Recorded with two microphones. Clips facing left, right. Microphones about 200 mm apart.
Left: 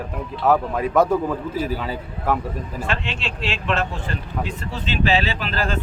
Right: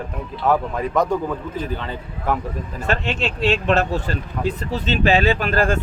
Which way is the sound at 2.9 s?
40° right (ahead or behind).